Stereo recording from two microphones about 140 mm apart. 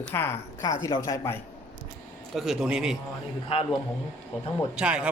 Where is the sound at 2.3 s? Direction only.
Centre (ahead or behind).